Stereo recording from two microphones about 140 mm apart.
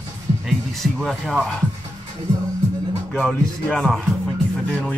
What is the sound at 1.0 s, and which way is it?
Speech, centre (ahead or behind).